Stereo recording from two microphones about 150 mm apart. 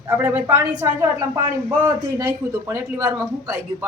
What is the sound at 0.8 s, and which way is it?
A man's voice, 25° right (ahead or behind).